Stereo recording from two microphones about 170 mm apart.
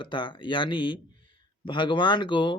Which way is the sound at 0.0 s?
30° left (ahead or behind).